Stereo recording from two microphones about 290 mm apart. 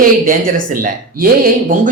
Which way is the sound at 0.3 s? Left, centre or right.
Right.